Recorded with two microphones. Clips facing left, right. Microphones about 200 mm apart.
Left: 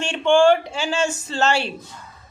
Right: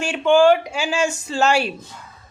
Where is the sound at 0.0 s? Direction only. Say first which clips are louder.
Right 1 dB; 5° right (ahead or behind).